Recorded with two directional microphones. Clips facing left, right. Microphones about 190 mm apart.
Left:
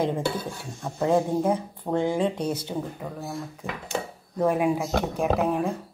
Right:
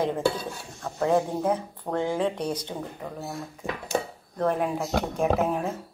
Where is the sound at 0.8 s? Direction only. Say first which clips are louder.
Left 1 dB; 10° left (ahead or behind).